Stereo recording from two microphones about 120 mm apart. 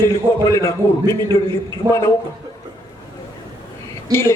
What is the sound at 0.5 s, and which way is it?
Speech, 25° left (ahead or behind).